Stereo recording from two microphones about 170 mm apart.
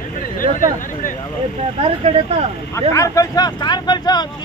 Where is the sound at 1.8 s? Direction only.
35° right (ahead or behind).